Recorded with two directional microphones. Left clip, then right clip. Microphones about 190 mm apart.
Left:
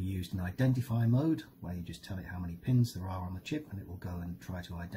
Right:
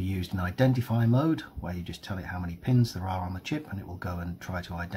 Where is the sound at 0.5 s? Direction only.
10° right (ahead or behind).